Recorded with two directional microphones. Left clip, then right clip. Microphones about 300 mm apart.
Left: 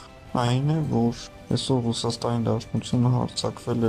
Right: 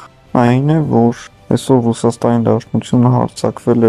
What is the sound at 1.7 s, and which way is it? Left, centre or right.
Speech, right.